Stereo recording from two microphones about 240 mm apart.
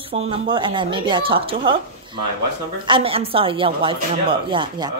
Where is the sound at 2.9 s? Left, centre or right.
Right.